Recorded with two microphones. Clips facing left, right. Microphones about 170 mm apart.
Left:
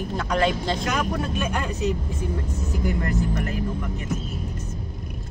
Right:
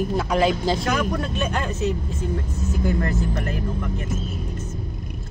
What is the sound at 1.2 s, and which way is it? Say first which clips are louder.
Speech: right 1 dB; 10° left (ahead or behind).